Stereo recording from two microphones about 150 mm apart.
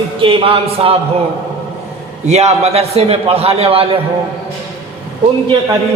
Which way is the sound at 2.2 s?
45° right (ahead or behind).